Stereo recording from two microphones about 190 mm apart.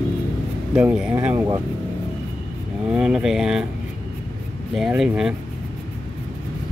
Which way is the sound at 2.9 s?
5° right (ahead or behind).